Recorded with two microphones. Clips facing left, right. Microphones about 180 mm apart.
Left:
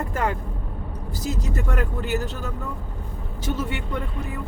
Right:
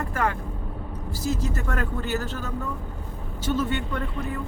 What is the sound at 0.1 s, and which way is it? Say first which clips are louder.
Vehicle: even; 20° left (ahead or behind).